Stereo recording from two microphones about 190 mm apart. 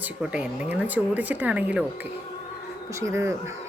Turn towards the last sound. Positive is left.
turn(degrees=-15)  # may be behind; listen again after turning